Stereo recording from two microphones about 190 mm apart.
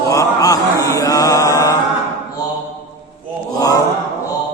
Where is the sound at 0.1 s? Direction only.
20° left (ahead or behind).